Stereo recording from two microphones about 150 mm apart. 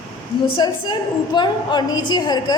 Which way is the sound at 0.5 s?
30° left (ahead or behind).